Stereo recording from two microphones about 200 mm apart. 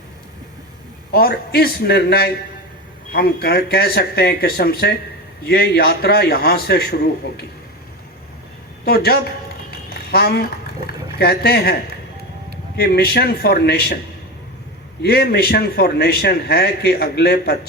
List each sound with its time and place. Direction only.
1.1 s a man's voice: 50° left (ahead or behind)
8.8 s a woman's voice: 50° left (ahead or behind)
9.9 s a sound: 50° left (ahead or behind)
11.2 s a man's voice: 50° left (ahead or behind)
15.0 s a man's voice: 50° left (ahead or behind)